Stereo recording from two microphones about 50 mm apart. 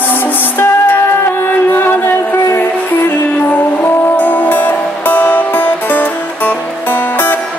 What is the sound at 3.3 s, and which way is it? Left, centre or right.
Music, left.